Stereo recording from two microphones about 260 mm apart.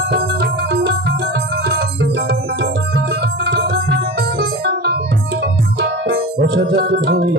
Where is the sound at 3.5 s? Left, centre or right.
Right.